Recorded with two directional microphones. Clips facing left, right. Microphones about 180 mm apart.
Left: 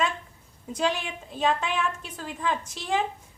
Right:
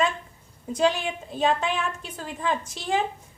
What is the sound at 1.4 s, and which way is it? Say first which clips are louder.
Speech: right 2 dB; 35° right (ahead or behind).